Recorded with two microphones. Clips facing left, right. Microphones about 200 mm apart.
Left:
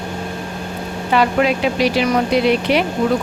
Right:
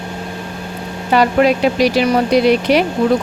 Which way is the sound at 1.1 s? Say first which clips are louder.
Right 3 dB; 40° right (ahead or behind).